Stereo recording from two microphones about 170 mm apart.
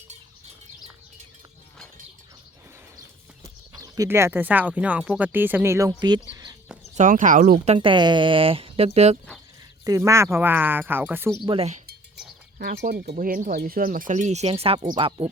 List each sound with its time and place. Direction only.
3.4 s speech: 20° right (ahead or behind)
6.3 s bird: 20° right (ahead or behind)
6.9 s speech: 50° right (ahead or behind)
7.6 s speech: 35° right (ahead or behind)
9.8 s speech: 20° right (ahead or behind)
11.4 s speech: 35° right (ahead or behind)
12.5 s speech: 65° right (ahead or behind)
13.1 s speech: 55° right (ahead or behind); by 15.3 s 30° right (ahead or behind)